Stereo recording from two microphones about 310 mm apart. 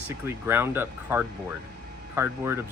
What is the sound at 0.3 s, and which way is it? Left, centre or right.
Speech, centre.